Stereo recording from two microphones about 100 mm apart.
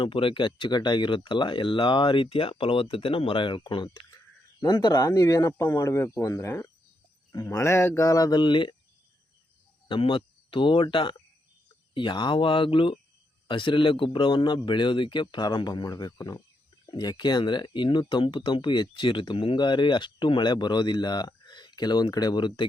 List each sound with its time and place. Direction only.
0.0 s speech: 60° left (ahead or behind)
4.6 s speech: 45° left (ahead or behind)
9.9 s speech: 65° left (ahead or behind)